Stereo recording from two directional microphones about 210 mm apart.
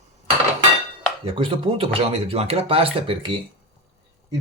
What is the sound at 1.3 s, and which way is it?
Speech, 25° right (ahead or behind).